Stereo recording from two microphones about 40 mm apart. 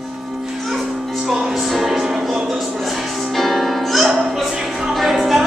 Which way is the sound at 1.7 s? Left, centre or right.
Centre.